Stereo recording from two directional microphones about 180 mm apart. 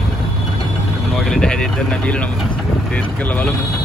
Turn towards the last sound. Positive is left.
turn(degrees=10)  # may be behind; listen again after turning